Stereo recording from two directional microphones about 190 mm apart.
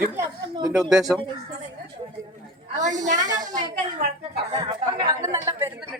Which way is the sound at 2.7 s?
40° right (ahead or behind).